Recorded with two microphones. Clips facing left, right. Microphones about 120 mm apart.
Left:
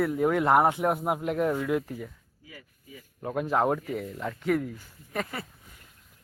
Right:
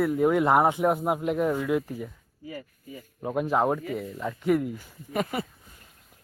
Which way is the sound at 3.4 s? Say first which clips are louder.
Even; centre (ahead or behind).